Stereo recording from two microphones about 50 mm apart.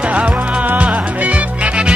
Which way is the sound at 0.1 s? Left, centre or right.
Right.